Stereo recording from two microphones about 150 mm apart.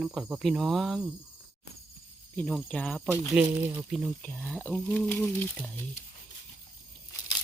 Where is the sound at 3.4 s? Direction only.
5° right (ahead or behind).